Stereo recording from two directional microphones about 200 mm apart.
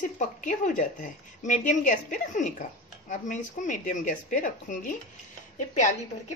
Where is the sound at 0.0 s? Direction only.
40° left (ahead or behind).